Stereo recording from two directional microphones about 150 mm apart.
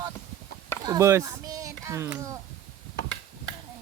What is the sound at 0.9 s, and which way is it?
Speech, 20° right (ahead or behind).